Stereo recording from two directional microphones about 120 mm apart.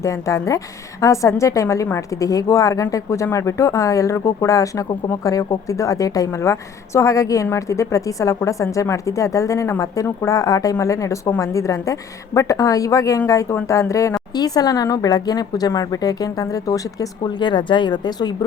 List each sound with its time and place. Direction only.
0.0 s a woman's voice: 25° left (ahead or behind)